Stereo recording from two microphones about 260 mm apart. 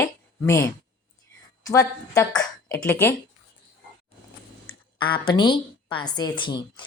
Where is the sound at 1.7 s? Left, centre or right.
Centre.